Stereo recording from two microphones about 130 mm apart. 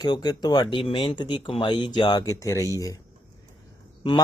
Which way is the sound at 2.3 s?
25° left (ahead or behind).